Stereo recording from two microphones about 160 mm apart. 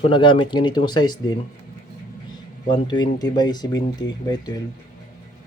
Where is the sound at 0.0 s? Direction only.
30° left (ahead or behind).